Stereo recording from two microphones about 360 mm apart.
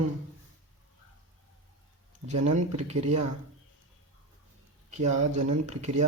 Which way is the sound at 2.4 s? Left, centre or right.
Centre.